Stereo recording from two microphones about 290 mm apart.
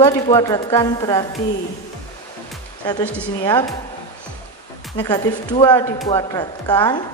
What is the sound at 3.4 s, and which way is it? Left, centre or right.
Speech, centre.